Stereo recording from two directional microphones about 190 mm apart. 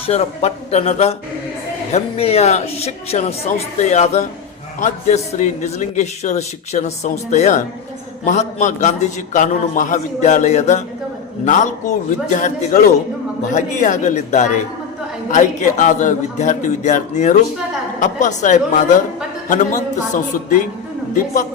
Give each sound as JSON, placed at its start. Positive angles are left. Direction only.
{"t": 0.0, "sound": "a man's voice", "side_deg": 35}